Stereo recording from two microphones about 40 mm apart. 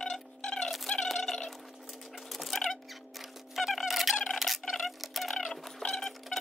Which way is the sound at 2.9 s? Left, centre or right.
Centre.